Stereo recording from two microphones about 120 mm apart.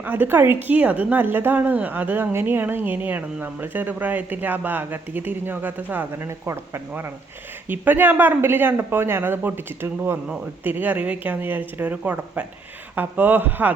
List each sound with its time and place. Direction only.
0.0 s speech: 15° right (ahead or behind)